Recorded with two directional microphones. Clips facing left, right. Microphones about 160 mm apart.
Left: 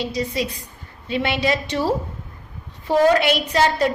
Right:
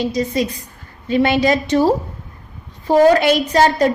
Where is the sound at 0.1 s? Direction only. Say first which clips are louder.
Right 5 dB; 45° right (ahead or behind).